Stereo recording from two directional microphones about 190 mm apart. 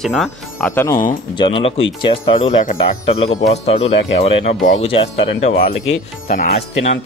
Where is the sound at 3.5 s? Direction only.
35° left (ahead or behind).